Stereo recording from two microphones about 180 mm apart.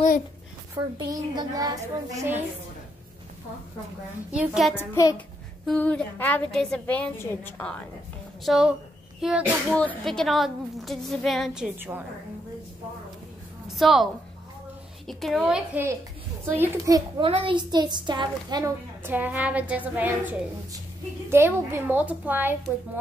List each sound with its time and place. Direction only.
0.9 s a woman's voice: 25° right (ahead or behind)
2.1 s a woman's voice: 10° right (ahead or behind)
4.3 s speech: 5° right (ahead or behind)
4.7 s a child's voice: 20° left (ahead or behind)
5.7 s a woman's voice: 5° left (ahead or behind)
8.5 s speech: 5° right (ahead or behind)
13.7 s a woman's voice: centre (ahead or behind)
15.0 s a woman's voice: centre (ahead or behind); by 17.0 s 15° right (ahead or behind)
17.2 s a woman's voice: 30° right (ahead or behind)
19.0 s a woman's voice: 10° right (ahead or behind)